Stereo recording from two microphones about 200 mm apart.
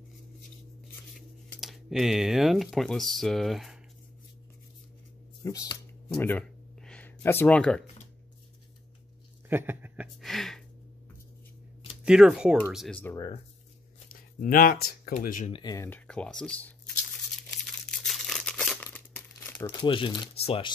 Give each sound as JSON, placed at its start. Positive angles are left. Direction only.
{"t": 1.5, "sound": "speech", "side_deg": 0}
{"t": 5.4, "sound": "a sound", "side_deg": 15}
{"t": 9.5, "sound": "speech", "side_deg": -10}
{"t": 10.2, "sound": "a sound", "side_deg": 0}
{"t": 12.0, "sound": "speech", "side_deg": -5}
{"t": 14.0, "sound": "a sound", "side_deg": 45}
{"t": 15.0, "sound": "speech", "side_deg": 40}
{"t": 15.5, "sound": "speech", "side_deg": 20}
{"t": 17.9, "sound": "crumpling", "side_deg": 0}
{"t": 19.8, "sound": "speech", "side_deg": 25}